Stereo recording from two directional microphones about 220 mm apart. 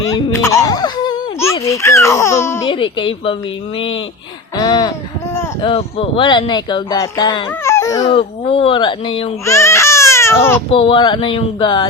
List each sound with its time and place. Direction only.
0.4 s speech: 15° left (ahead or behind)
2.6 s speech: 20° left (ahead or behind)
4.5 s speech: 15° left (ahead or behind)
10.7 s speech: 25° left (ahead or behind)